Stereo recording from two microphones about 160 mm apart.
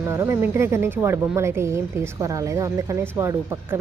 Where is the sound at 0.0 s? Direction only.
15° right (ahead or behind).